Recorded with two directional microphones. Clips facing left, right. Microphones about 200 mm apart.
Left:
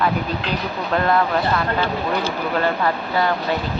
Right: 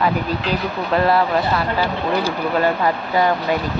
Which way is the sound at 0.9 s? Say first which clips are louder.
Right 2 dB; 5° right (ahead or behind).